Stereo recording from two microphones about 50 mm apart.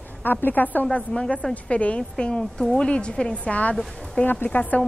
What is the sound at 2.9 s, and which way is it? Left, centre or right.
A woman's voice, left.